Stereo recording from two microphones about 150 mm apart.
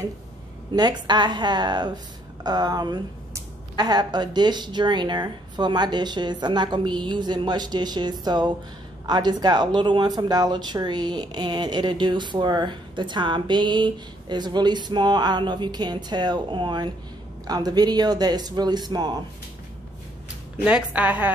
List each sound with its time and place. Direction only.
0.7 s a woman's voice: 30° right (ahead or behind)
20.6 s a woman's voice: 10° right (ahead or behind)